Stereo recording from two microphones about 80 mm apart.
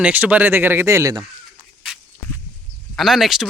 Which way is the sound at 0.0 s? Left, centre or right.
Centre.